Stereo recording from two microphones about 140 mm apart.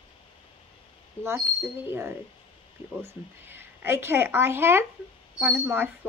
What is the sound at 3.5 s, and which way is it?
A woman's voice, 15° right (ahead or behind).